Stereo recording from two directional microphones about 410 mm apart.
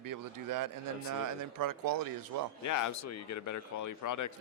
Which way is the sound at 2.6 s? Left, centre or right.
Left.